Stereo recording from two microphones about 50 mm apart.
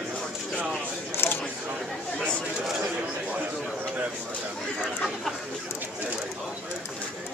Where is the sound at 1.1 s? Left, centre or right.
Left.